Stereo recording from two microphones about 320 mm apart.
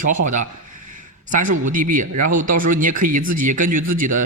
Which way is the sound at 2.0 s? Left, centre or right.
Right.